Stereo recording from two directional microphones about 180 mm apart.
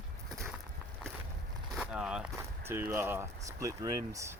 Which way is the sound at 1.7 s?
5° right (ahead or behind).